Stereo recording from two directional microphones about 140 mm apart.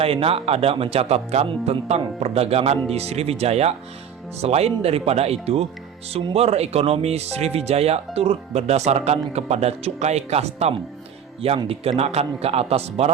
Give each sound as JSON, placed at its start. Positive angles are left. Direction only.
{"t": 0.0, "sound": "speech", "side_deg": -45}